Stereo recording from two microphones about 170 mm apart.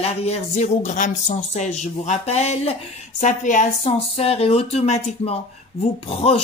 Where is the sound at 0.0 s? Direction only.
35° left (ahead or behind).